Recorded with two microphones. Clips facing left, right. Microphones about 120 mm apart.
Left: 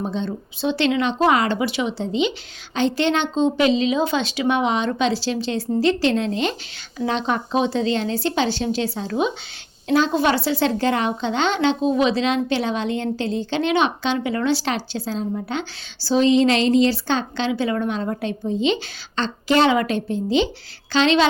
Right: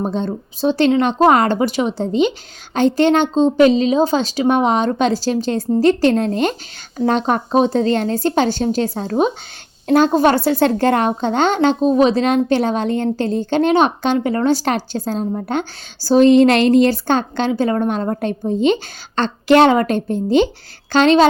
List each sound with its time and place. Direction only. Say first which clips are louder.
0.0 s speech: right 5 dB; 45° right (ahead or behind)
19.7 s speech: right 4 dB; 45° right (ahead or behind)